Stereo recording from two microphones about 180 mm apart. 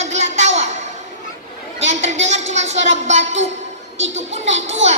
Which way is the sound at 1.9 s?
40° right (ahead or behind).